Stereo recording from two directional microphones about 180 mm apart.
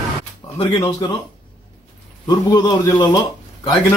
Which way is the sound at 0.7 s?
20° left (ahead or behind).